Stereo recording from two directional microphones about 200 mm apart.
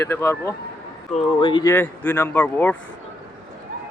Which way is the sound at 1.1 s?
30° left (ahead or behind).